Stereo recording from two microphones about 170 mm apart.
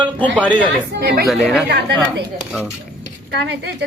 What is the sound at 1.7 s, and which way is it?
Speech, 75° right (ahead or behind).